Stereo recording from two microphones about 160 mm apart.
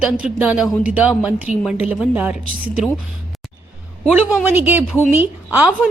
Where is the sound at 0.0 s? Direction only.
10° right (ahead or behind).